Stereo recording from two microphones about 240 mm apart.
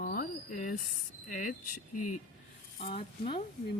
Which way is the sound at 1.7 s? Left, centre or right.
Left.